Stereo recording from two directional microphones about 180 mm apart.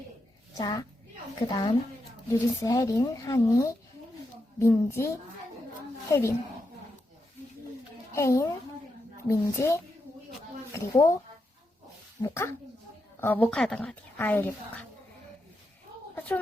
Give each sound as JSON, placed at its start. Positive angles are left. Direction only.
{"t": 0.5, "sound": "a woman's voice", "side_deg": 20}
{"t": 8.1, "sound": "speech", "side_deg": 15}
{"t": 12.2, "sound": "speech", "side_deg": 15}
{"t": 16.1, "sound": "a sound", "side_deg": 10}